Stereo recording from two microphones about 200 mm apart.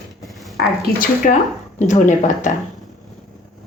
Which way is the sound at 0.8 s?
45° left (ahead or behind).